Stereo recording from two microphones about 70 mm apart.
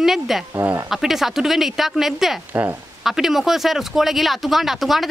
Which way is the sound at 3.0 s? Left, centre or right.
Centre.